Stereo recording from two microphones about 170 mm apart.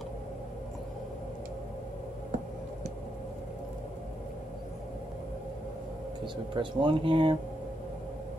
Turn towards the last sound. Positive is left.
turn(degrees=-30)  # may be behind; listen again after turning